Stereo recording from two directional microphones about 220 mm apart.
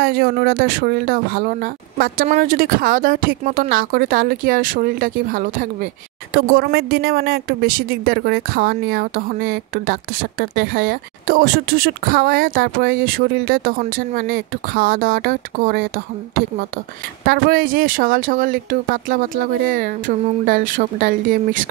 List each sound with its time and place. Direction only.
0.0 s speech: 45° right (ahead or behind)
17.3 s speech: 40° right (ahead or behind)